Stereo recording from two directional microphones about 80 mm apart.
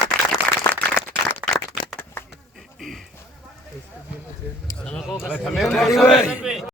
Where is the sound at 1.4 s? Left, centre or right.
Right.